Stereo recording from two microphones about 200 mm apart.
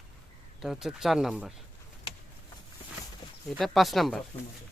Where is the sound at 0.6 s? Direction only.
Centre (ahead or behind).